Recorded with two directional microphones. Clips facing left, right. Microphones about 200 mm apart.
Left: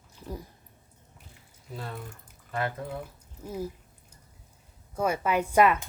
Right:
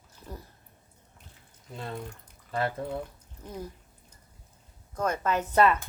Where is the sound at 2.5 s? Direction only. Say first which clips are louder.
Right 2 dB; 30° right (ahead or behind).